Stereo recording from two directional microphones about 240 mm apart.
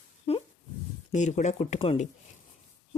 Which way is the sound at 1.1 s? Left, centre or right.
Left.